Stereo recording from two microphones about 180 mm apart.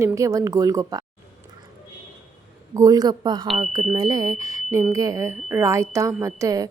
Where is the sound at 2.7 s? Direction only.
20° right (ahead or behind).